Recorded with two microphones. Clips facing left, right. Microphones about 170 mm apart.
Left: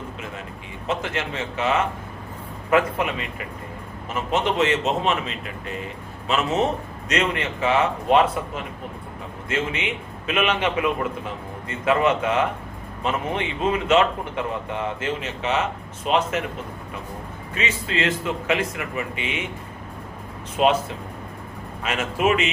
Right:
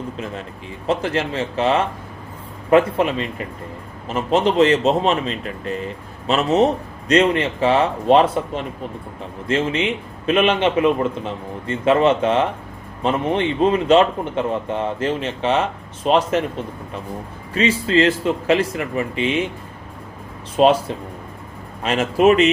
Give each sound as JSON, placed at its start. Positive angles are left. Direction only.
{"t": 0.9, "sound": "speech", "side_deg": -35}
{"t": 17.5, "sound": "speech", "side_deg": -35}
{"t": 20.6, "sound": "speech", "side_deg": -30}
{"t": 21.8, "sound": "speech", "side_deg": -35}